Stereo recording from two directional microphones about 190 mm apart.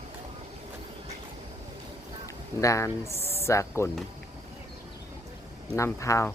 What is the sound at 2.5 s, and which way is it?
Speech, 15° left (ahead or behind).